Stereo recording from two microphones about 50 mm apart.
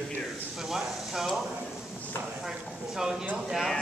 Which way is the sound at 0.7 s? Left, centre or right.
Centre.